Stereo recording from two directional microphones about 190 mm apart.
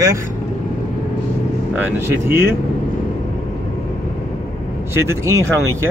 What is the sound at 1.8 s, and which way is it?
Speech, 10° right (ahead or behind).